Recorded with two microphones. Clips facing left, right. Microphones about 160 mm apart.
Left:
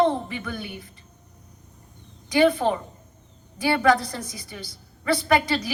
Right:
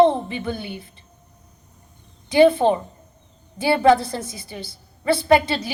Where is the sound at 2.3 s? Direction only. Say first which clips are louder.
Right 5 dB; 25° right (ahead or behind).